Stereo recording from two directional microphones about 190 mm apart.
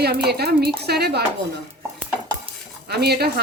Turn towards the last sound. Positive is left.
turn(degrees=-55)  # may be behind; listen again after turning